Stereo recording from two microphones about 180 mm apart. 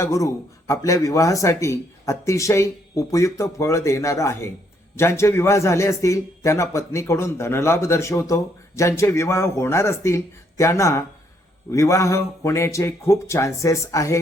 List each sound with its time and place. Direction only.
0.0 s a man's voice: 15° left (ahead or behind)